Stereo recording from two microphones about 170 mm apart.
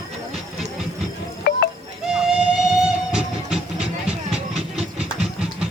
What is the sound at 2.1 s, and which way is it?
Music, 5° right (ahead or behind).